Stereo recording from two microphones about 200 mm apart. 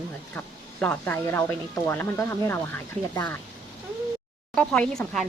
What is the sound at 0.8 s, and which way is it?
Speech, 10° left (ahead or behind).